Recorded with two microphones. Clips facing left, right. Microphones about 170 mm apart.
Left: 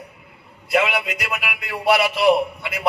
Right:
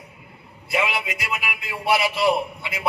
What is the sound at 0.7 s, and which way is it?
A man's voice, 65° left (ahead or behind).